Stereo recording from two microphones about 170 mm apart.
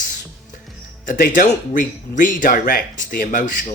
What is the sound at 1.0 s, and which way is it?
Speech, 50° left (ahead or behind).